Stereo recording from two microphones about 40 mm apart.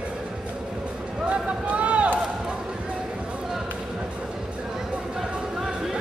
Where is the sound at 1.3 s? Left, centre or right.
Right.